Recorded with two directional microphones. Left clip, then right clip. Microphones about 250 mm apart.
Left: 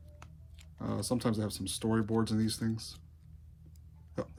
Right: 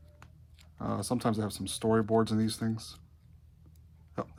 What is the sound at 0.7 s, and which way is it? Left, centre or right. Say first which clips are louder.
Speech: right 2 dB; right.